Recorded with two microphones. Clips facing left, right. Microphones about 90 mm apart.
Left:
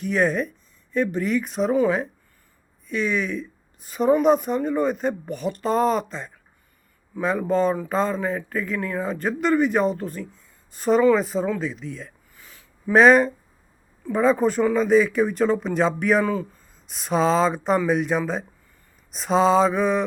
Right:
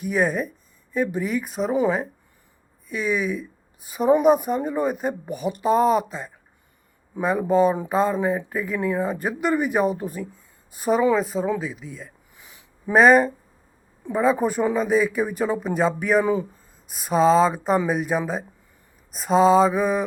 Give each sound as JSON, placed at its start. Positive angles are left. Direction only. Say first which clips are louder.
{"t": 0.0, "sound": "speech", "louder": "left 1 dB", "side_deg": -5}
{"t": 2.9, "sound": "speech", "louder": "even", "side_deg": -5}
{"t": 12.4, "sound": "a sound", "louder": "left 1 dB", "side_deg": -20}
{"t": 12.9, "sound": "speech", "louder": "even", "side_deg": -5}
{"t": 16.2, "sound": "speech", "louder": "right 2 dB", "side_deg": -15}
{"t": 16.9, "sound": "speech", "louder": "right 3 dB", "side_deg": -5}